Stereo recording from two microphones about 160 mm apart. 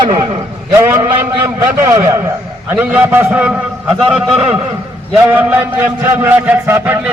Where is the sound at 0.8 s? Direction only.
15° right (ahead or behind).